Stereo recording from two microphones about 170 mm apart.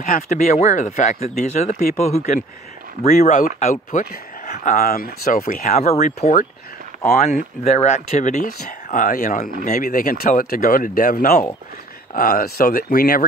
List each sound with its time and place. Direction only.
0.0 s speech: 50° left (ahead or behind)
5.8 s speech: 40° left (ahead or behind); by 13.2 s 60° left (ahead or behind)